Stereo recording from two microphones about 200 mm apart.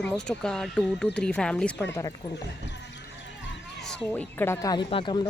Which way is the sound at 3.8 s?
5° left (ahead or behind).